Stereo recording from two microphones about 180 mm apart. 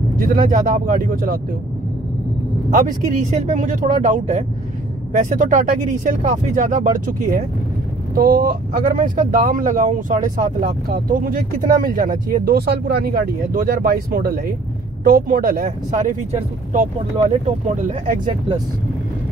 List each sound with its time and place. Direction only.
0.2 s speech: 50° right (ahead or behind)
2.7 s speech: 45° right (ahead or behind)
16.3 s speech: 40° right (ahead or behind)